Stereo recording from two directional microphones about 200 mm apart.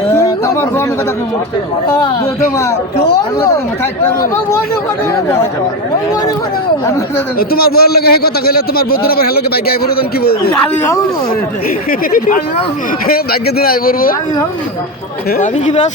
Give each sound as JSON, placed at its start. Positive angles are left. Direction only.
{"t": 0.1, "sound": "a sound", "side_deg": 15}
{"t": 5.1, "sound": "speech", "side_deg": 15}
{"t": 7.3, "sound": "a man's voice", "side_deg": 50}
{"t": 11.9, "sound": "a man's voice", "side_deg": 45}
{"t": 15.4, "sound": "speech", "side_deg": 35}